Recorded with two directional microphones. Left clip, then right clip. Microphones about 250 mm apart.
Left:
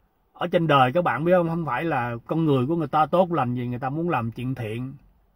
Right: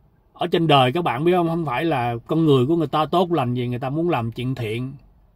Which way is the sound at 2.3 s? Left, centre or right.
Centre.